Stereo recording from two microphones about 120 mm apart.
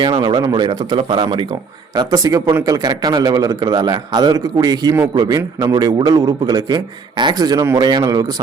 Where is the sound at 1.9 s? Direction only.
30° right (ahead or behind).